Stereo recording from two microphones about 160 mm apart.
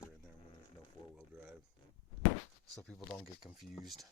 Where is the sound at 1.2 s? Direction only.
10° right (ahead or behind).